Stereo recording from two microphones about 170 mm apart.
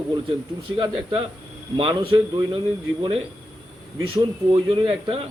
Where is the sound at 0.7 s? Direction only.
35° right (ahead or behind).